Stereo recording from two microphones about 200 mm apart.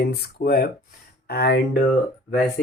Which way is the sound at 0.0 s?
50° left (ahead or behind).